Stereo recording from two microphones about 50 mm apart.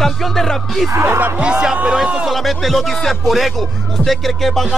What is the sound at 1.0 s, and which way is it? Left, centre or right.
Speech, right.